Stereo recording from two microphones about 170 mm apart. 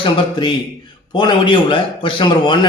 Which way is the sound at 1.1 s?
30° left (ahead or behind).